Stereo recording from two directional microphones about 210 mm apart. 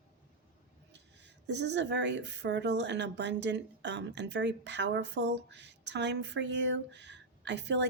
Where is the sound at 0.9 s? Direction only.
55° right (ahead or behind).